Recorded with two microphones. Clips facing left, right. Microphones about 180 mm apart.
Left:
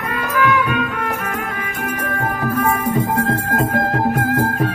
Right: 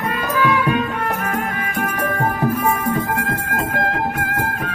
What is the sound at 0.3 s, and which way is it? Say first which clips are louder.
Music: left 1 dB; 30° right (ahead or behind).